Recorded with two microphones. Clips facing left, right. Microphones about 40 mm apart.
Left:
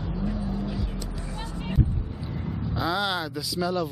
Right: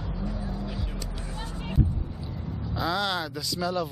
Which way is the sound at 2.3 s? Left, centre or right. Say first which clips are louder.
Left 5 dB; left.